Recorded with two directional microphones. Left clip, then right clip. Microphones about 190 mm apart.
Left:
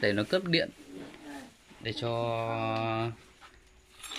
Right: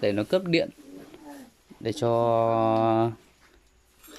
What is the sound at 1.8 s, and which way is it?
Speech, 30° right (ahead or behind).